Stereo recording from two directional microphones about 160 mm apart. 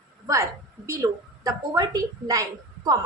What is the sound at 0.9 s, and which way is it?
A woman's voice, 20° right (ahead or behind).